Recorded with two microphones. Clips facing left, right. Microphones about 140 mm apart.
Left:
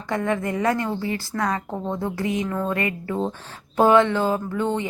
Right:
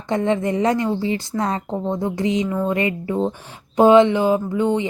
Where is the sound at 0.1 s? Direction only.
20° right (ahead or behind).